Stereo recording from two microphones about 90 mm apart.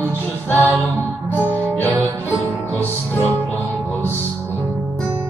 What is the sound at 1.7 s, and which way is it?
Music, 20° left (ahead or behind).